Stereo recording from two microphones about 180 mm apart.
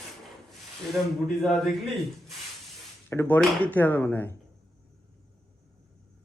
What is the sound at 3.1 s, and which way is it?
Speech, 10° left (ahead or behind).